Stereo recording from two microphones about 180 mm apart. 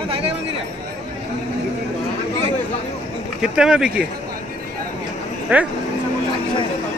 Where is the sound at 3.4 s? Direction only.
5° right (ahead or behind).